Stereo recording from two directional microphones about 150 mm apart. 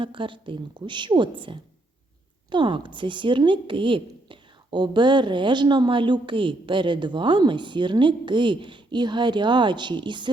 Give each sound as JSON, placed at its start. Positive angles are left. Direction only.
{"t": 0.0, "sound": "speech", "side_deg": -35}